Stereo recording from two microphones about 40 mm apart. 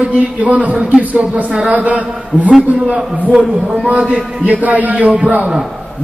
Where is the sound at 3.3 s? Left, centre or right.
Centre.